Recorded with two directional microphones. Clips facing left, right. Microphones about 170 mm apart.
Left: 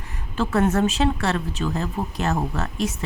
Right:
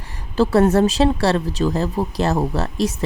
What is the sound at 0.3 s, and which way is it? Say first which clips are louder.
Speech: right 6 dB; 35° right (ahead or behind).